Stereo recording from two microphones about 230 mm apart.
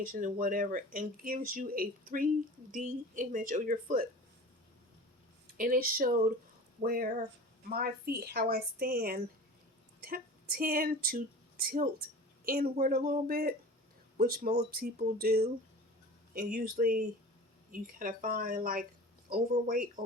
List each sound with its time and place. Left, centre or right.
0.0 s speech: right
5.5 s speech: right